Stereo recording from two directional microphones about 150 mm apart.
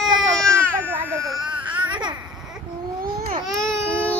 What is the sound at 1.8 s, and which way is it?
Babbling, 30° right (ahead or behind).